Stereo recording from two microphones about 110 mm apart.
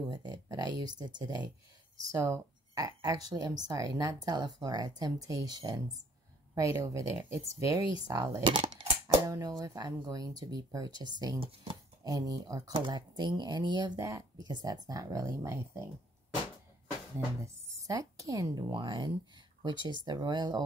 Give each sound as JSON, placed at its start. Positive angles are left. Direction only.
{"t": 0.1, "sound": "speech", "side_deg": -40}
{"t": 2.1, "sound": "speech", "side_deg": -25}
{"t": 12.7, "sound": "speech", "side_deg": -45}
{"t": 13.9, "sound": "speech", "side_deg": -30}
{"t": 17.4, "sound": "speech", "side_deg": -30}